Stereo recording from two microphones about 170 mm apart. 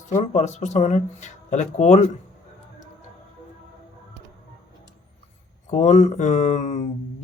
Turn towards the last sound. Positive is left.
turn(degrees=45)  # may be behind; listen again after turning